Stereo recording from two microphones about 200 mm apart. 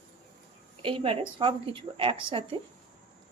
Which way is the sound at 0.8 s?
25° right (ahead or behind).